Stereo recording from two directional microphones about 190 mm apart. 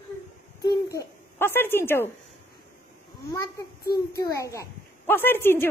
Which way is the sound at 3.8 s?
55° left (ahead or behind).